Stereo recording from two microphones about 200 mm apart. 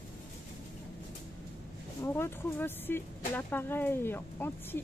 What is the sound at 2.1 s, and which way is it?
Speech, 10° left (ahead or behind).